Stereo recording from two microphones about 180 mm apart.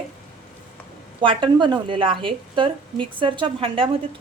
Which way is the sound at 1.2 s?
25° right (ahead or behind).